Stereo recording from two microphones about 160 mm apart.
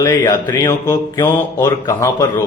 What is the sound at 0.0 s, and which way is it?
A man's voice, 25° left (ahead or behind).